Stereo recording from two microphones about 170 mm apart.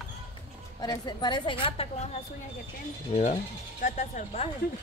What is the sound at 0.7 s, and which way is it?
A woman's voice, 25° left (ahead or behind).